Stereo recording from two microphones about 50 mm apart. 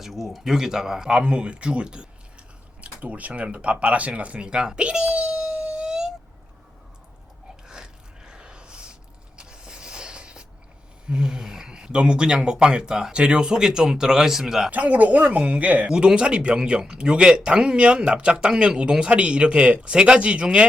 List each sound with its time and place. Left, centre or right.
0.0 s speech: centre
7.7 s a sound: centre
11.1 s speech: centre
14.7 s speech: right
15.9 s speech: centre